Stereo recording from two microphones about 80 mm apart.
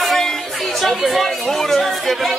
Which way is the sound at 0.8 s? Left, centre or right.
Centre.